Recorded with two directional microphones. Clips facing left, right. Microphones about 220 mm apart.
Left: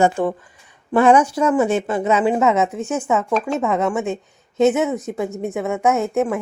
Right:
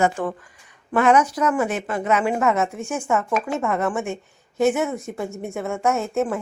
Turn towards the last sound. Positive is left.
turn(degrees=15)  # may be behind; listen again after turning